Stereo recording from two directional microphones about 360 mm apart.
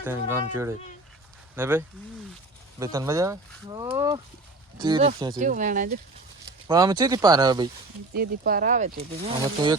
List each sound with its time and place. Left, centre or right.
0.0 s speech: centre; by 6.0 s right
6.7 s speech: centre
8.1 s speech: right